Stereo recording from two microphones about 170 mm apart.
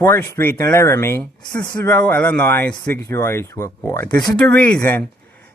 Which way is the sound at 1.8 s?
10° left (ahead or behind).